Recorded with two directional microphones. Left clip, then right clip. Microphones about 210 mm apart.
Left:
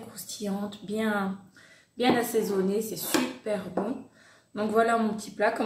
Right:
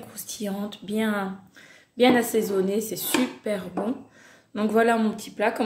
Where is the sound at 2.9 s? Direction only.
35° right (ahead or behind).